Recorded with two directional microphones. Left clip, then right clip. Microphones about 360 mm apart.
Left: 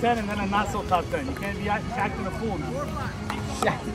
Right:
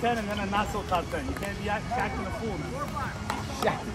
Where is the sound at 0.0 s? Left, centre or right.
Left.